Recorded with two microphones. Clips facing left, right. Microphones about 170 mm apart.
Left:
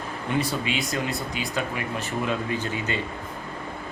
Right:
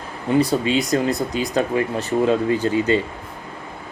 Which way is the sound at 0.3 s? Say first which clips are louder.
Right 9 dB; 30° right (ahead or behind).